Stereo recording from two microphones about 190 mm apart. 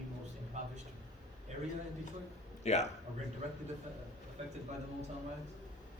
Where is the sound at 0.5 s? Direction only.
35° right (ahead or behind).